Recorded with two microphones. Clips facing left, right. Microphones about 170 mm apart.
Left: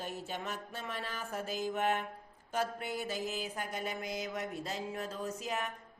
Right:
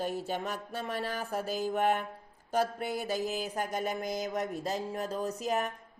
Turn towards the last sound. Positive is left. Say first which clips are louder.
# right 6 dB
turn(degrees=-40)  # may be behind; listen again after turning